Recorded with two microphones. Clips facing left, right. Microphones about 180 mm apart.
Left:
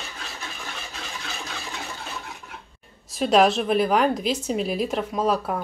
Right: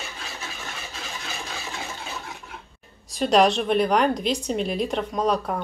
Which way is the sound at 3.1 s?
Centre (ahead or behind).